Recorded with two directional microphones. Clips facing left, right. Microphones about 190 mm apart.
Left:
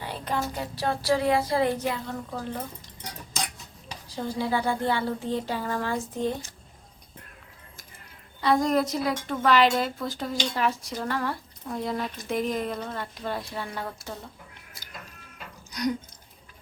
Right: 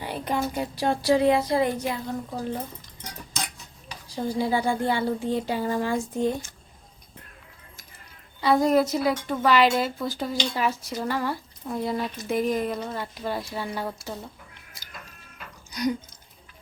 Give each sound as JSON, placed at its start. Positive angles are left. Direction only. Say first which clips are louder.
{"t": 0.0, "sound": "speech", "louder": "right 3 dB", "side_deg": -15}
{"t": 4.1, "sound": "speech", "louder": "right 3 dB", "side_deg": -15}
{"t": 8.4, "sound": "speech", "louder": "right 3 dB", "side_deg": -5}
{"t": 15.7, "sound": "speech", "louder": "right 1 dB", "side_deg": 0}